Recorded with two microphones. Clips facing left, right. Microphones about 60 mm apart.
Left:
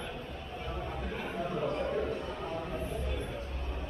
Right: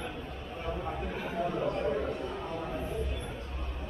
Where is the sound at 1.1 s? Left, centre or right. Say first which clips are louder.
Right 2 dB; centre.